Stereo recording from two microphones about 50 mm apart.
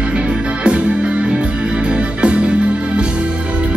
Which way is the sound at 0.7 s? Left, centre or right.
Centre.